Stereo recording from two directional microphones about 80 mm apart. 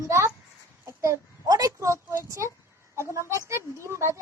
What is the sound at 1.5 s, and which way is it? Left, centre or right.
Speech, right.